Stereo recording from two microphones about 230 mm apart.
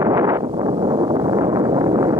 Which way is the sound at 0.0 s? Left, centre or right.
Centre.